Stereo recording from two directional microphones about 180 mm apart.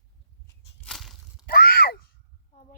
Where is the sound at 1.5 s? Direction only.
55° left (ahead or behind).